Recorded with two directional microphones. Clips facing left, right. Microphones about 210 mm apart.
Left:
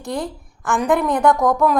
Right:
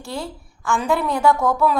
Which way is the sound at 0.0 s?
20° left (ahead or behind).